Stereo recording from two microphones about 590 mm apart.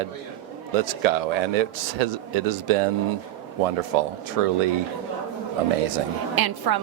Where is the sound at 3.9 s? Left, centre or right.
Right.